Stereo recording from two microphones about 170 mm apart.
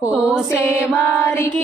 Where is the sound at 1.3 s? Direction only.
15° left (ahead or behind).